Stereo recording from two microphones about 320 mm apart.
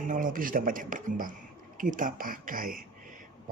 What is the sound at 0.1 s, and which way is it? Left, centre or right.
Speech, right.